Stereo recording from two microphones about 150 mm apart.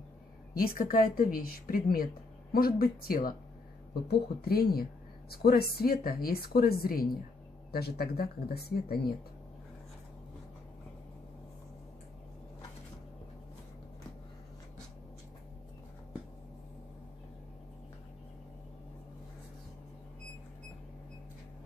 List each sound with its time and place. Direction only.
0.6 s speech: 70° left (ahead or behind)
4.5 s a woman's voice: 90° left